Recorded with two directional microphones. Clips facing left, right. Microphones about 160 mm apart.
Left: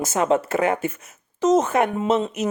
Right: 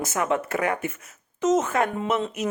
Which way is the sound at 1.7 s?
20° left (ahead or behind).